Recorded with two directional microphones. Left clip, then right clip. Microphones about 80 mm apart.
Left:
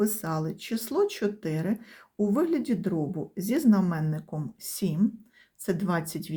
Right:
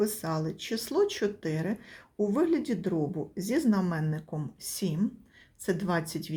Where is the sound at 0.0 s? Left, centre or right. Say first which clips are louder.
Left 1 dB; left.